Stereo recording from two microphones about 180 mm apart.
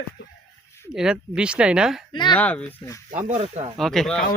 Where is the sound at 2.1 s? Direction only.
25° left (ahead or behind).